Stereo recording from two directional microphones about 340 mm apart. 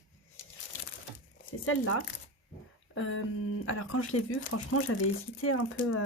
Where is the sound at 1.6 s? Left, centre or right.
Left.